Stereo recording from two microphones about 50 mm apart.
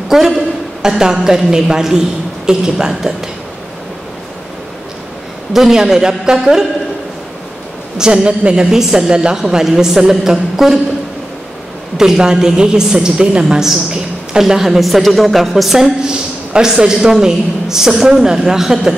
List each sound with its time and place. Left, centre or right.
0.1 s a woman's voice: centre
5.5 s a woman's voice: centre
8.0 s a woman's voice: centre
8.7 s a woman's voice: centre
12.0 s a woman's voice: centre
16.1 s a woman's voice: centre